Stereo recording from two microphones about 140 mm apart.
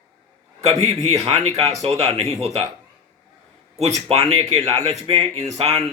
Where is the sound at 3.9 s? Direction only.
50° right (ahead or behind).